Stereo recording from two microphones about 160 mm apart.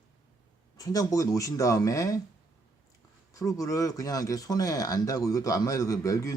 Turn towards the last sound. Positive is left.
turn(degrees=20)  # may be behind; listen again after turning